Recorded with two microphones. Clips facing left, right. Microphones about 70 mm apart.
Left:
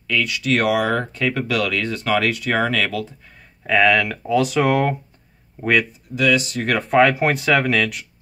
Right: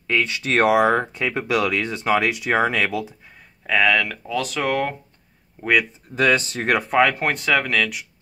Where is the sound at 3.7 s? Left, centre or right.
Centre.